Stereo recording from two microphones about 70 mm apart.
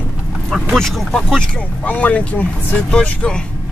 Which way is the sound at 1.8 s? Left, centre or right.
Left.